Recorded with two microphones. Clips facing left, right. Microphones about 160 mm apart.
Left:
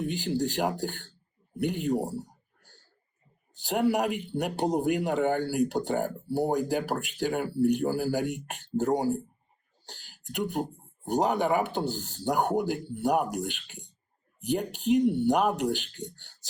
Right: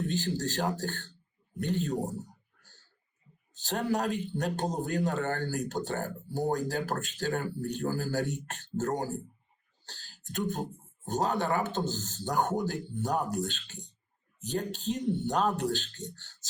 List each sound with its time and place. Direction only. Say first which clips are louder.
0.0 s speech: left 3 dB; 15° left (ahead or behind)
2.0 s speech: left 3 dB; 35° left (ahead or behind)
2.6 s a sound: left 4 dB; 15° left (ahead or behind)
3.5 s speech: left 5 dB; 15° left (ahead or behind)